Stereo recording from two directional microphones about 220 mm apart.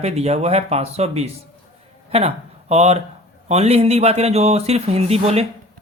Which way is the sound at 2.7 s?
30° right (ahead or behind).